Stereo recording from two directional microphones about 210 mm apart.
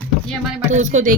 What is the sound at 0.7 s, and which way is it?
Speech, 35° right (ahead or behind).